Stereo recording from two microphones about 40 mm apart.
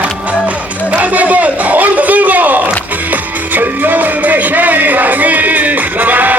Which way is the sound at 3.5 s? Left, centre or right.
Right.